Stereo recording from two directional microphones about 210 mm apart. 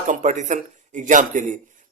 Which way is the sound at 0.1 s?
35° right (ahead or behind).